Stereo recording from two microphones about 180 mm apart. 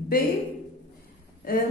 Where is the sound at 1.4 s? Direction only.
50° left (ahead or behind).